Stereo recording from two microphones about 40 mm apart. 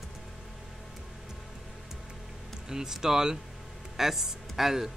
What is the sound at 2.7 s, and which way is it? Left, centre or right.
Speech, centre.